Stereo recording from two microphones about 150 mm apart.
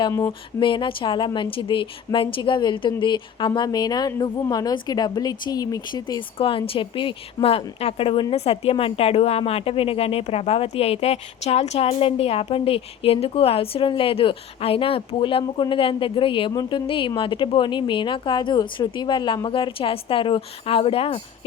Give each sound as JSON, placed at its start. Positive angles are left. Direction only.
{"t": 0.1, "sound": "speech", "side_deg": 15}
{"t": 0.6, "sound": "a woman's voice", "side_deg": 35}